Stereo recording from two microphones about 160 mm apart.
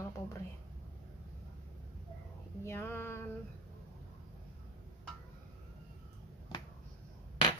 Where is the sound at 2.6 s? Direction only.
15° left (ahead or behind).